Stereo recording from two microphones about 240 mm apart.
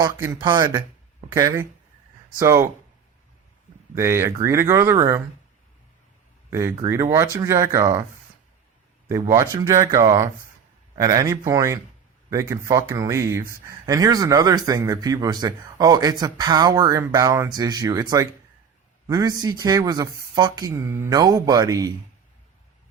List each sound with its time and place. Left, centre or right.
0.2 s speech: centre
3.9 s speech: centre
6.5 s speech: centre
9.0 s speech: centre